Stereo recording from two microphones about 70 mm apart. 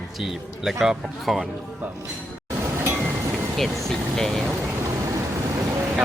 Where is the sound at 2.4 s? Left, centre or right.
Right.